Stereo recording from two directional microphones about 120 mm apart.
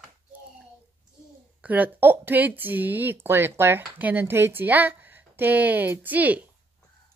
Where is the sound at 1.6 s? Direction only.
15° right (ahead or behind).